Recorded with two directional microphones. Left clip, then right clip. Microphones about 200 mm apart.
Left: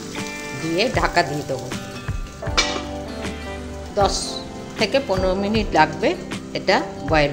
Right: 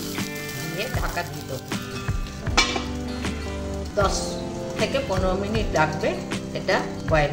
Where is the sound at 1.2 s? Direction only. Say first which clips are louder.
Left 12 dB; 35° left (ahead or behind).